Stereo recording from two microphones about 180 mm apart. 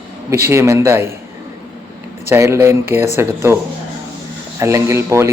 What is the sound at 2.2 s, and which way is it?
A man's voice, 15° right (ahead or behind).